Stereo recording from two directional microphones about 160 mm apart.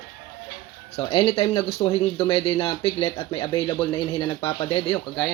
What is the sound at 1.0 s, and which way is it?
Speech, 35° left (ahead or behind).